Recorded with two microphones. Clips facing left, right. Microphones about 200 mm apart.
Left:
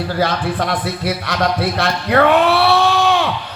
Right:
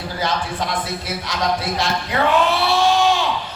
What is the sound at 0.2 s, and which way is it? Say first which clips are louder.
Speech: left 4 dB; 60° left (ahead or behind).